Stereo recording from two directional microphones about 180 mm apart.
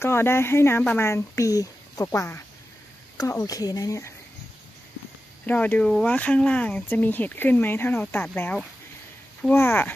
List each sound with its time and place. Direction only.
0.0 s speech: 15° left (ahead or behind)
5.5 s speech: 10° left (ahead or behind)